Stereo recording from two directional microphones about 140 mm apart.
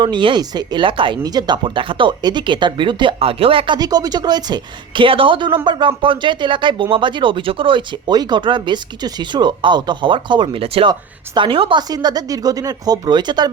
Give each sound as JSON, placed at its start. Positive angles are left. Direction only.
{"t": 0.0, "sound": "speech", "side_deg": -35}
{"t": 3.8, "sound": "speech", "side_deg": -25}